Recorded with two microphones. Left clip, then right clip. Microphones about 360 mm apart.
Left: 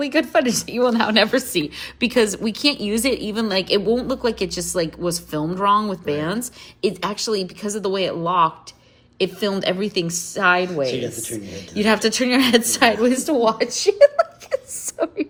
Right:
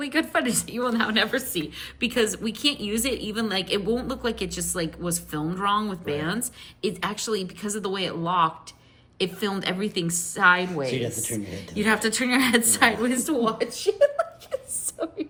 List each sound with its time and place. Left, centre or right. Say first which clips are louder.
0.0 s a woman's voice: left 6 dB; centre
10.8 s a woman's voice: left 4 dB; centre
11.7 s a woman's voice: left 5 dB; centre